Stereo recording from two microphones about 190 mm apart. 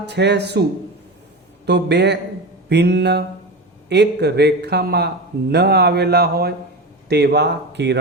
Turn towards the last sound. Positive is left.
turn(degrees=-65)  # may be behind; listen again after turning